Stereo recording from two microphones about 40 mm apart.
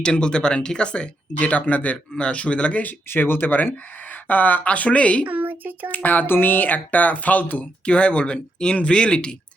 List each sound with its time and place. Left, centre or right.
0.0 s speech: left
2.1 s a man's voice: left
3.1 s speech: left
3.5 s speech: left
4.7 s a man's voice: left
5.3 s speech: right
5.9 s speech: left
6.2 s speech: left